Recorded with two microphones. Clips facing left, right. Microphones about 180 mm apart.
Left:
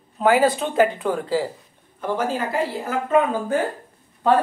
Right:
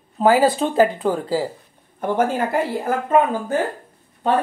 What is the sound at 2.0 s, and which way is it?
Speech, 55° right (ahead or behind).